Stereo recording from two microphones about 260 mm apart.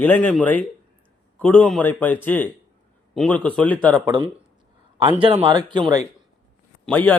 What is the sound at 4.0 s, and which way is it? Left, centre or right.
Speech, centre.